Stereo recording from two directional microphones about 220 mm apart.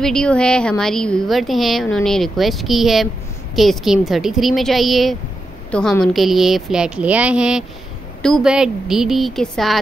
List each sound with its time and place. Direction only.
0.0 s a woman's voice: 5° left (ahead or behind)